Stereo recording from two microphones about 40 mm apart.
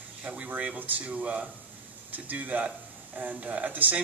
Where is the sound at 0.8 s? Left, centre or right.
Right.